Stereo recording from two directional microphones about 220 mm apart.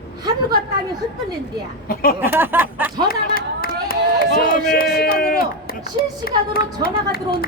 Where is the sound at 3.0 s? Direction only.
40° left (ahead or behind).